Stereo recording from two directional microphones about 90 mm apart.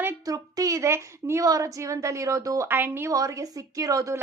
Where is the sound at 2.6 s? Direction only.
25° right (ahead or behind).